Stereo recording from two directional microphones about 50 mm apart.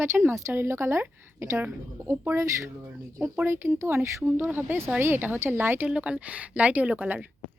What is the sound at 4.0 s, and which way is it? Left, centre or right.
Speech, right.